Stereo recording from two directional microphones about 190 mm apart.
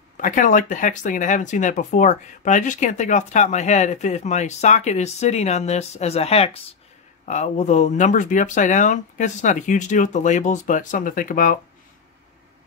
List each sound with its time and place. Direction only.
0.2 s speech: 45° left (ahead or behind)